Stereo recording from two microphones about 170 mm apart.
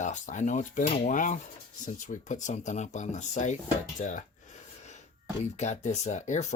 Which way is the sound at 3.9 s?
45° left (ahead or behind).